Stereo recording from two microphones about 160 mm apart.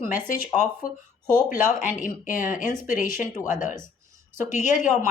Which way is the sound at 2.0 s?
55° left (ahead or behind).